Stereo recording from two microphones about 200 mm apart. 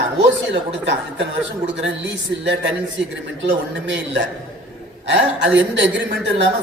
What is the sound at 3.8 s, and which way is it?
Speech, 65° right (ahead or behind).